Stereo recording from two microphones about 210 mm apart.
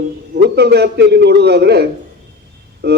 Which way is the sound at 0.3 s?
50° right (ahead or behind).